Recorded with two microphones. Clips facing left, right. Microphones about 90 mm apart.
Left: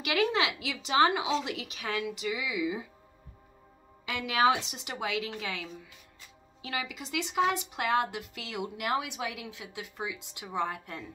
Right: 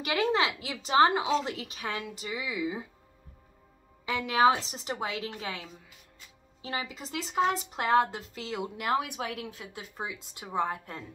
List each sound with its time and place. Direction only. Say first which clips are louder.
0.0 s a woman's voice: right 1 dB; 35° right (ahead or behind)
4.0 s a woman's voice: right 3 dB; 35° right (ahead or behind)